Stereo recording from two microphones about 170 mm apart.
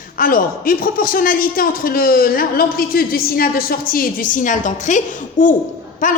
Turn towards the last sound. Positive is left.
turn(degrees=50)  # may be behind; listen again after turning